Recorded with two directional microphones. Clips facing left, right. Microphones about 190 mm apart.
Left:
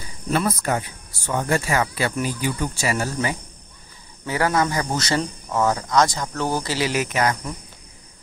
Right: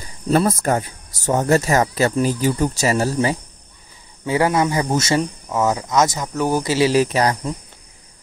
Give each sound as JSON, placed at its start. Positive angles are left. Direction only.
{"t": 0.0, "sound": "speech", "side_deg": -45}
{"t": 4.3, "sound": "speech", "side_deg": -20}